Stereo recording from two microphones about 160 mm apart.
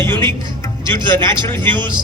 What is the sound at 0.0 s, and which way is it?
Music, 15° left (ahead or behind).